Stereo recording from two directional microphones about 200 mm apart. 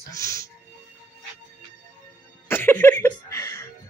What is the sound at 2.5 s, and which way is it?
Music, 10° left (ahead or behind).